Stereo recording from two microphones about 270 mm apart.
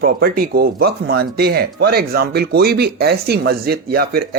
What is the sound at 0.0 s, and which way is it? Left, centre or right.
Speech, right.